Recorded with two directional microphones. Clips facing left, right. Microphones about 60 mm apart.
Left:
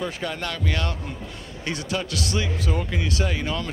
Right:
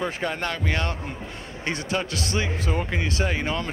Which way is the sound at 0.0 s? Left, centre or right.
Right.